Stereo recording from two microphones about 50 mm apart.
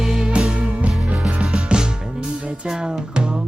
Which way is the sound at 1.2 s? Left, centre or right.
Centre.